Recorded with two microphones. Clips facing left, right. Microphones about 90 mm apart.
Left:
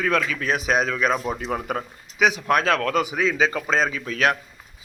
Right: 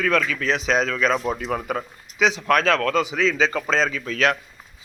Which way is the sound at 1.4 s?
25° left (ahead or behind).